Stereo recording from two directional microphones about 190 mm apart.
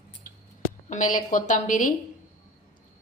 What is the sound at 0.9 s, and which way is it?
A woman's voice, 40° left (ahead or behind).